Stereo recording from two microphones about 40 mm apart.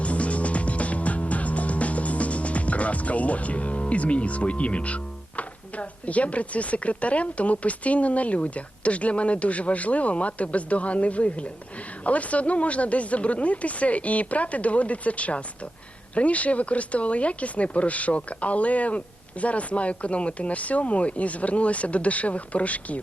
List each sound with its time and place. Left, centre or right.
0.0 s music: left
5.4 s speech: left